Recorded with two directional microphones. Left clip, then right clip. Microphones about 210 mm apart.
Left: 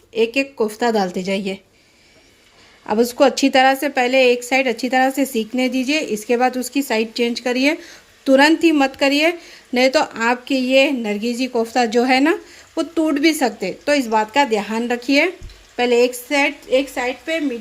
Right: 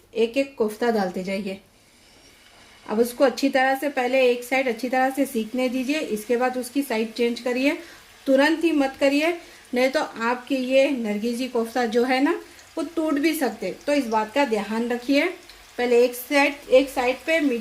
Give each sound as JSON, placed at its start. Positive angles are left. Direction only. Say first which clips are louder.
{"t": 0.1, "sound": "a woman's voice", "louder": "left 4 dB", "side_deg": 40}
{"t": 2.8, "sound": "a woman's voice", "louder": "left 5 dB", "side_deg": 40}